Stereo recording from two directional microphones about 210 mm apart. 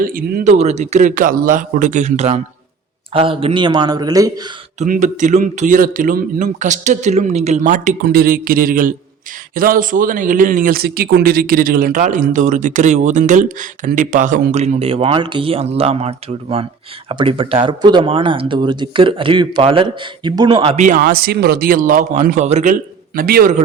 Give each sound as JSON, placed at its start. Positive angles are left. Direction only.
{"t": 0.0, "sound": "a man's voice", "side_deg": -40}
{"t": 4.8, "sound": "a man's voice", "side_deg": -35}